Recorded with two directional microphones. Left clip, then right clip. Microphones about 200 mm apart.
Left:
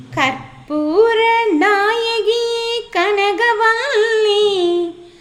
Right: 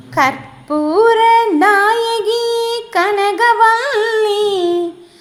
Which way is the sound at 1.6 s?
20° left (ahead or behind).